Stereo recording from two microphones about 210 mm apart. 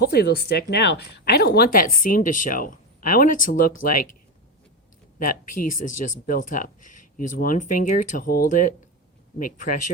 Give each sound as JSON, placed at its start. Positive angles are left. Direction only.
{"t": 0.0, "sound": "speech", "side_deg": 50}
{"t": 5.2, "sound": "speech", "side_deg": 40}